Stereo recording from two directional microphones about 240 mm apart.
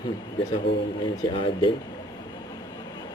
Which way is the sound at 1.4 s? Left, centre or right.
Left.